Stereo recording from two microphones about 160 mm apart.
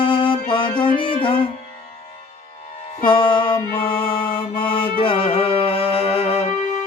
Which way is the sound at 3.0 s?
30° left (ahead or behind).